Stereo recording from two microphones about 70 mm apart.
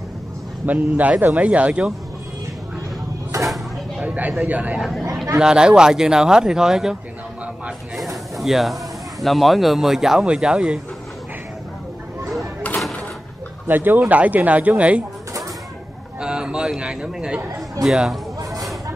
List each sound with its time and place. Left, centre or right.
0.7 s speech: right
4.0 s a sound: right
4.5 s speech: right
5.4 s speech: centre
8.4 s speech: centre
13.7 s speech: right
16.2 s a sound: centre
17.8 s speech: centre
18.4 s a sound: right